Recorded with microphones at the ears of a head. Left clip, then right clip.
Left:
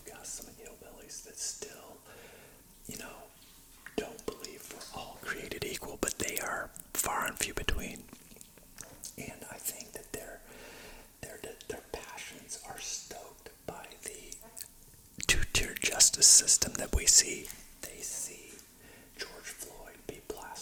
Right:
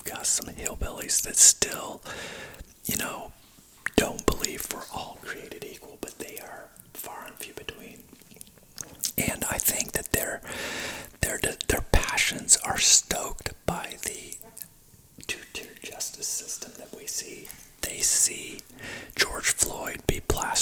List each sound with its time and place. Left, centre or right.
0.0 s speech: right
5.7 s speech: left
8.7 s speech: right
15.2 s speech: left
17.7 s speech: right